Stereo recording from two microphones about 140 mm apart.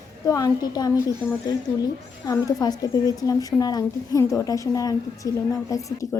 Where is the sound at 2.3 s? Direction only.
25° left (ahead or behind).